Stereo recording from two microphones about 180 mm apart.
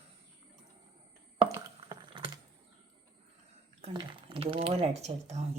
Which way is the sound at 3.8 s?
30° right (ahead or behind).